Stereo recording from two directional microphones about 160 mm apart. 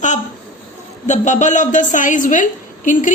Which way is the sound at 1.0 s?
50° left (ahead or behind).